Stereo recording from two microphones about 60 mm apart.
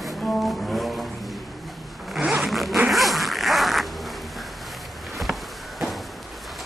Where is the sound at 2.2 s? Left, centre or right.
Centre.